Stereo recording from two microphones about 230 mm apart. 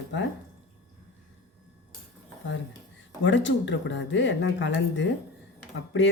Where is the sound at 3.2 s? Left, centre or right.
Left.